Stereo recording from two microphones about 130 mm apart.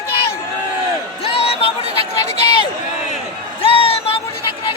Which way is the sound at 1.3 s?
50° left (ahead or behind).